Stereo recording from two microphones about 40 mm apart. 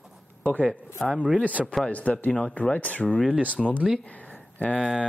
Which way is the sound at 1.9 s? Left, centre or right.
Left.